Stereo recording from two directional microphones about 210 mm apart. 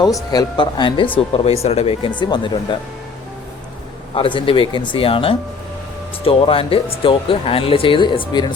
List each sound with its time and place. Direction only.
0.3 s speech: 20° left (ahead or behind)
4.1 s speech: 25° left (ahead or behind)